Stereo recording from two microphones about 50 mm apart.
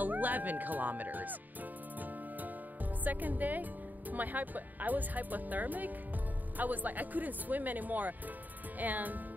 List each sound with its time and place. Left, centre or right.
0.0 s speech: right
3.0 s speech: right